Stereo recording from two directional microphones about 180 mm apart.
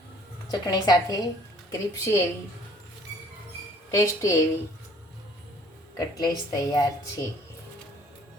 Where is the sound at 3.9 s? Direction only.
15° left (ahead or behind).